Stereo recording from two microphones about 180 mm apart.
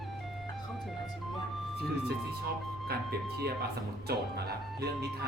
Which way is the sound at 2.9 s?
60° right (ahead or behind).